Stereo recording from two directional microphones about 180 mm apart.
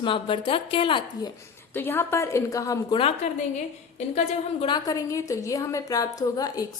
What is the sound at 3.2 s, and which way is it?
Speech, 35° left (ahead or behind).